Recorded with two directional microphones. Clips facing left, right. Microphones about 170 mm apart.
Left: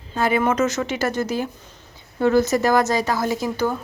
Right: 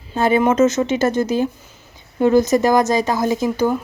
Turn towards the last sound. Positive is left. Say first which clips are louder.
# right 5 dB
turn(degrees=-15)  # may be behind; listen again after turning